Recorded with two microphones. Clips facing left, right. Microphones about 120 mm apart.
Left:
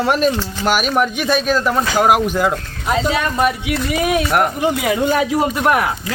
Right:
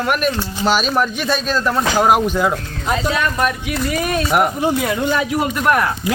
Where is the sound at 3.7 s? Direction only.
Centre (ahead or behind).